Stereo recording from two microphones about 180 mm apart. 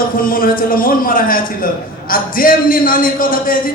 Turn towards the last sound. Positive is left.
turn(degrees=50)  # may be behind; listen again after turning